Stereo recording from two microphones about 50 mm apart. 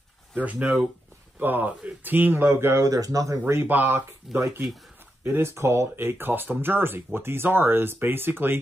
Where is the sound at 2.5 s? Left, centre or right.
Right.